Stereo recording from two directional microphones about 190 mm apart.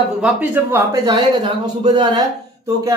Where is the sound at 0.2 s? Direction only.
10° right (ahead or behind).